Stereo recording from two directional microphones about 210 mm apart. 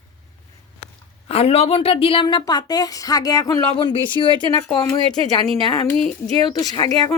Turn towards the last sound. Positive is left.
turn(degrees=15)  # may be behind; listen again after turning